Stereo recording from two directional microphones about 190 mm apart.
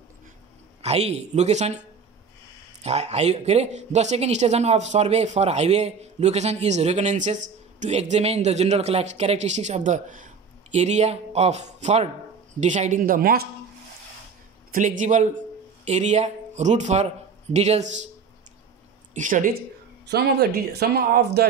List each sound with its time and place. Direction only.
0.8 s speech: 35° right (ahead or behind)
2.8 s a man's voice: 35° right (ahead or behind); by 13.5 s 50° right (ahead or behind)
14.7 s speech: 40° right (ahead or behind)
19.1 s speech: 40° right (ahead or behind)
20.1 s speech: 60° right (ahead or behind)